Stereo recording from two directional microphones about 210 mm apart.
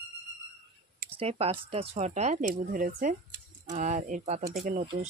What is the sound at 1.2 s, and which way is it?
Speech, 30° right (ahead or behind).